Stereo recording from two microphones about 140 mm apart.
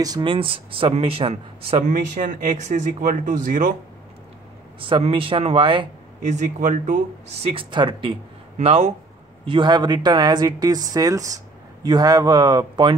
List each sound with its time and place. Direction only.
0.0 s speech: 30° right (ahead or behind)
1.9 s speech: 65° right (ahead or behind)
4.7 s speech: 40° right (ahead or behind)
6.3 s speech: 65° right (ahead or behind); by 8.2 s 35° right (ahead or behind)
8.5 s speech: 50° right (ahead or behind)
9.5 s speech: 30° right (ahead or behind)